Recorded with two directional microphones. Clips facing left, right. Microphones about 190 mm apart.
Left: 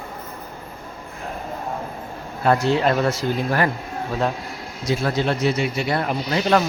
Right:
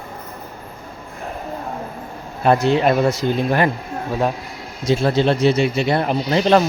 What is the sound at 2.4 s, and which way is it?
Speech, 20° right (ahead or behind).